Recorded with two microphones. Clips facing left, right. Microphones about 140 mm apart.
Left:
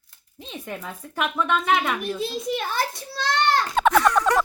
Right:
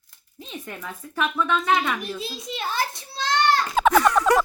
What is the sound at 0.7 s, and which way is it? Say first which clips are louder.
Speech: left 2 dB; 15° left (ahead or behind).